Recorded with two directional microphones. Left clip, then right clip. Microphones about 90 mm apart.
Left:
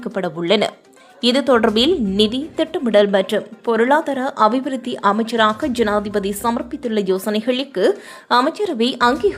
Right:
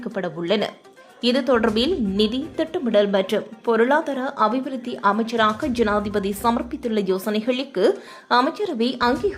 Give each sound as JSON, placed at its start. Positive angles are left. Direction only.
{"t": 0.0, "sound": "a woman's voice", "side_deg": 35}
{"t": 8.4, "sound": "speech", "side_deg": 30}